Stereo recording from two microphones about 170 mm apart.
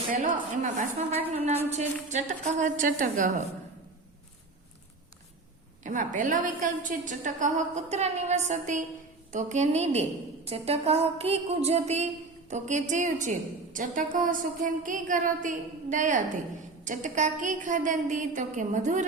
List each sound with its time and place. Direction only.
0.1 s a woman's voice: 50° right (ahead or behind)
5.8 s a woman's voice: 50° right (ahead or behind)